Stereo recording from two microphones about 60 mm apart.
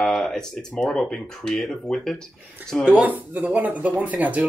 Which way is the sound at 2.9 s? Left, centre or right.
Right.